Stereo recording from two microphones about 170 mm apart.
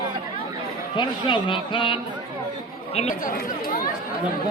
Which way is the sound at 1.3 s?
30° left (ahead or behind).